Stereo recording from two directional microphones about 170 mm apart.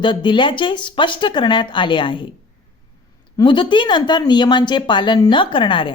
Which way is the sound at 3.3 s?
30° left (ahead or behind).